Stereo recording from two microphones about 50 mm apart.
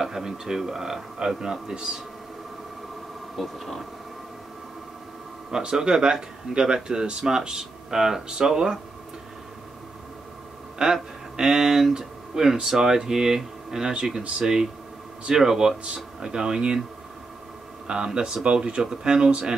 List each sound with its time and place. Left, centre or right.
0.0 s speech: centre
3.3 s speech: centre
5.5 s speech: centre
10.8 s speech: centre
17.8 s speech: centre